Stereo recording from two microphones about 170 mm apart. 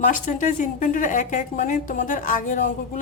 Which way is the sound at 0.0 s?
50° left (ahead or behind).